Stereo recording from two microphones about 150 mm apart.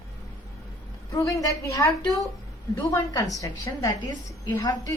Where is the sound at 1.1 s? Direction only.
20° left (ahead or behind).